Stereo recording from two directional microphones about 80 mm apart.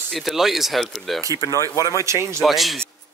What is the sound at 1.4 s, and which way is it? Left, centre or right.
Speech, left.